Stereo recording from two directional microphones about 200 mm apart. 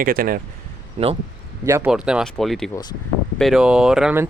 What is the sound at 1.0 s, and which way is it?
Speech, 35° right (ahead or behind).